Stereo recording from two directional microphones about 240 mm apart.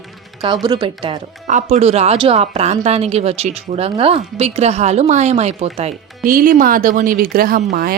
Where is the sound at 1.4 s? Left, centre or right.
Right.